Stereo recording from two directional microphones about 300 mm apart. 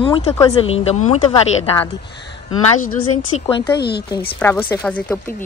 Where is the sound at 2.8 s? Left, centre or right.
Left.